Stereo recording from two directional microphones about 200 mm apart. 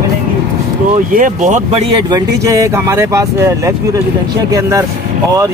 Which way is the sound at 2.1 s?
15° right (ahead or behind).